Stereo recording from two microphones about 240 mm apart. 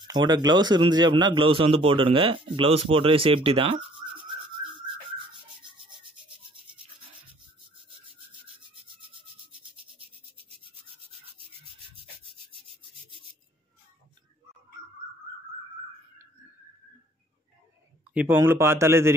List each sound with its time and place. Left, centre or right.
0.0 s a man's voice: centre
8.3 s rub: right
11.6 s rub: right
18.1 s speech: centre